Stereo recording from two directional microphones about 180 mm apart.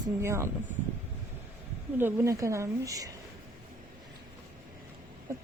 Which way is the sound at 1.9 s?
15° right (ahead or behind).